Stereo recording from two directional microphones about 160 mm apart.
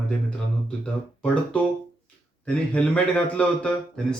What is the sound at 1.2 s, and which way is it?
A man's voice, 5° left (ahead or behind).